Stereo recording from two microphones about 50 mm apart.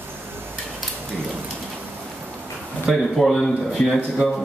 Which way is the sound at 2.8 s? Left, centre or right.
Centre.